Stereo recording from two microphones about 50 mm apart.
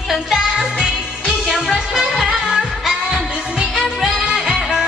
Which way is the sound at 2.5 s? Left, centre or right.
Centre.